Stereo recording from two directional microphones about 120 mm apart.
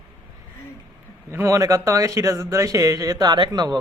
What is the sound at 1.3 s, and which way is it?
A man's voice, 25° right (ahead or behind).